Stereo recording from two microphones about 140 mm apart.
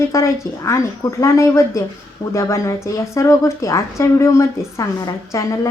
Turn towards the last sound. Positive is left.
turn(degrees=25)  # may be behind; listen again after turning